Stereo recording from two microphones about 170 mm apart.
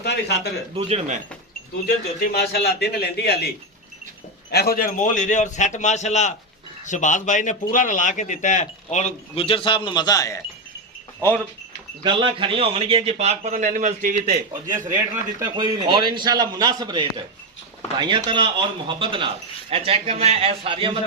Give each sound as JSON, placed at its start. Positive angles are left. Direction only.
{"t": 0.0, "sound": "a man's voice", "side_deg": 75}
{"t": 0.8, "sound": "a man's voice", "side_deg": -35}
{"t": 2.3, "sound": "a man's voice", "side_deg": 70}
{"t": 4.5, "sound": "speech", "side_deg": 60}
{"t": 12.0, "sound": "a man's voice", "side_deg": -30}
{"t": 15.1, "sound": "a man's voice", "side_deg": -20}